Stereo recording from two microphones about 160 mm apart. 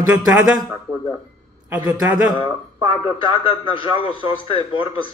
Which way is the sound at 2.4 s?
35° left (ahead or behind).